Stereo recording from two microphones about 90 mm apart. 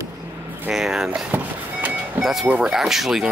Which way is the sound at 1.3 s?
20° right (ahead or behind).